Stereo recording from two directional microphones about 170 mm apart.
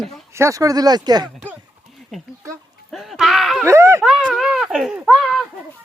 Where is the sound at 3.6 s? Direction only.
15° right (ahead or behind).